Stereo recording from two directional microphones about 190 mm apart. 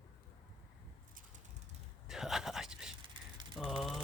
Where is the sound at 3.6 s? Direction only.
Centre (ahead or behind).